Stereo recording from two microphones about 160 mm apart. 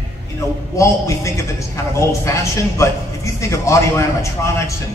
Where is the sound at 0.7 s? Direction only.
20° left (ahead or behind).